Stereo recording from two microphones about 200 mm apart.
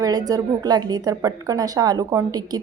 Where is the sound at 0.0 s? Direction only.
20° right (ahead or behind).